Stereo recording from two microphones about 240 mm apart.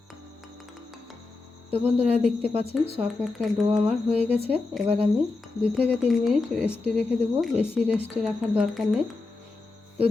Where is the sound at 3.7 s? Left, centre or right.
Right.